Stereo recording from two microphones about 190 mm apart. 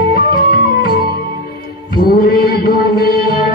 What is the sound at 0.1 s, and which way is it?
Music, 55° left (ahead or behind).